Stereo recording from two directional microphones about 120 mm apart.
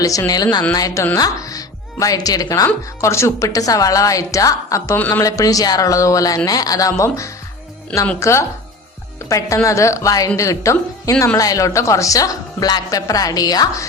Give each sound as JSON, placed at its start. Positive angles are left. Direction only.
{"t": 0.0, "sound": "speech", "side_deg": 30}
{"t": 4.9, "sound": "a man's voice", "side_deg": 15}
{"t": 5.2, "sound": "speech", "side_deg": 30}
{"t": 9.6, "sound": "speech", "side_deg": 25}